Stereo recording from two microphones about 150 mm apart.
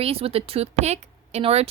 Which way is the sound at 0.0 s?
40° right (ahead or behind).